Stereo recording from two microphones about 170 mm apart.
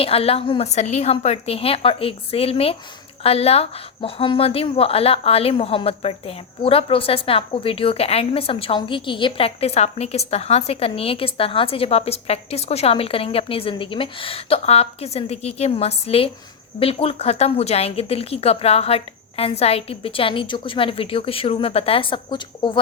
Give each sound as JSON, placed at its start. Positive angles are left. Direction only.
{"t": 0.0, "sound": "speech", "side_deg": 35}